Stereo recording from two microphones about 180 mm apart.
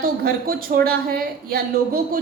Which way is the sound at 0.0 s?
55° right (ahead or behind).